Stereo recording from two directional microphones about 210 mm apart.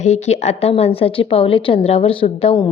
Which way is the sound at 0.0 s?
35° left (ahead or behind).